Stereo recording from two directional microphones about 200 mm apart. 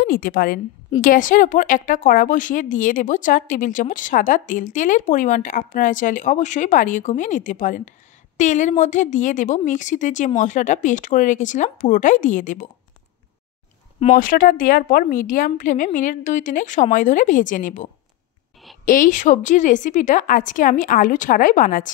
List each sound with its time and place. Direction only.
0.0 s a woman's voice: 45° left (ahead or behind)
14.1 s a woman's voice: 45° left (ahead or behind)
18.9 s a woman's voice: 40° left (ahead or behind)